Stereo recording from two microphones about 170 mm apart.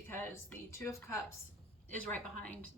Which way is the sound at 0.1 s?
15° left (ahead or behind).